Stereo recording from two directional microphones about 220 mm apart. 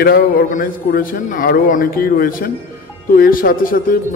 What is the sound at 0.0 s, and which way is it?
A man's voice, 45° left (ahead or behind).